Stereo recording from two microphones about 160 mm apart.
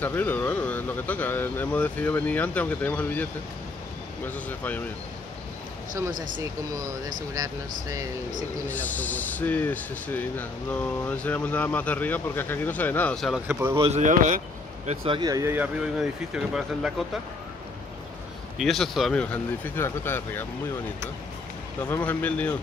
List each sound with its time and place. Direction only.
0.0 s speech: 10° left (ahead or behind)
4.3 s speech: 10° left (ahead or behind)
6.1 s speech: 55° right (ahead or behind)
8.6 s speech: 10° left (ahead or behind)
13.5 s speech: 15° right (ahead or behind)
13.7 s speech: 40° right (ahead or behind)
14.0 s speech: 50° right (ahead or behind)
14.9 s speech: 30° right (ahead or behind); by 17.2 s 5° right (ahead or behind)
18.6 s speech: centre (ahead or behind)
21.8 s speech: 15° left (ahead or behind)